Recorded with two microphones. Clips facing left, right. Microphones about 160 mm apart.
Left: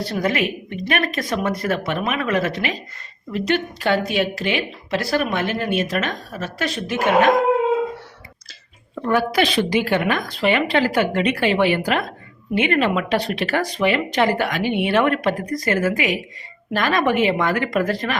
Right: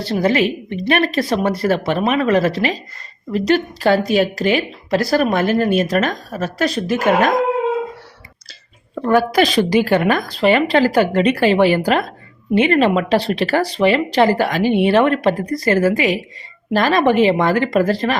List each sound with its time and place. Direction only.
0.0 s speech: 30° right (ahead or behind)
9.0 s speech: 40° right (ahead or behind)